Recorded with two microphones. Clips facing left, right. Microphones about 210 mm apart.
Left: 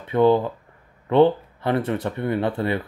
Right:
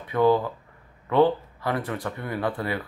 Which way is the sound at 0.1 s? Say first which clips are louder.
Left 3 dB; 25° left (ahead or behind).